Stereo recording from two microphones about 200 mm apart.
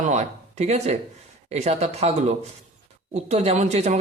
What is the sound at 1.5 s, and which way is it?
A man's voice, 30° right (ahead or behind).